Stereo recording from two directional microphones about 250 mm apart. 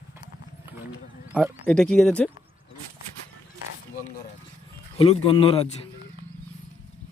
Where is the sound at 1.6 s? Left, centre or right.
Centre.